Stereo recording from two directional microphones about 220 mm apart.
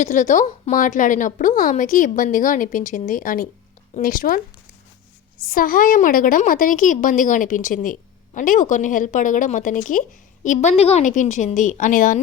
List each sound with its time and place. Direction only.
0.0 s a woman's voice: 35° left (ahead or behind)
5.5 s a woman's voice: 40° left (ahead or behind)